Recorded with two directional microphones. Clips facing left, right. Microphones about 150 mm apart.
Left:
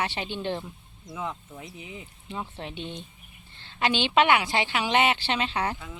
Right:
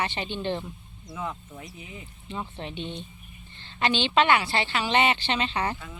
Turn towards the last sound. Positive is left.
turn(degrees=10)  # may be behind; listen again after turning